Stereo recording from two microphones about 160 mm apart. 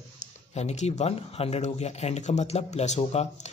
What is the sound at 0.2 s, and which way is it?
A man's voice, 45° left (ahead or behind).